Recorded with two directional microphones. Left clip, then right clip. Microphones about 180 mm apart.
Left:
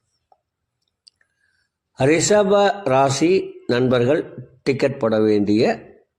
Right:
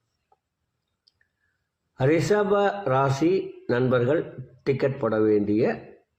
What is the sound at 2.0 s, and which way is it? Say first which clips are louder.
A man's voice: left 6 dB; 40° left (ahead or behind).